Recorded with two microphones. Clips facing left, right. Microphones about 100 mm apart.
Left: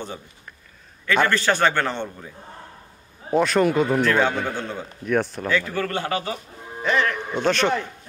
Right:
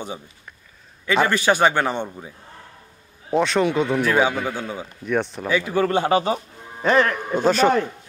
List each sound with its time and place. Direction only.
1.0 s a man's voice: 10° right (ahead or behind)
3.3 s a man's voice: centre (ahead or behind)
5.5 s a man's voice: 15° right (ahead or behind)
6.8 s speech: 40° right (ahead or behind)
7.4 s a man's voice: 5° right (ahead or behind)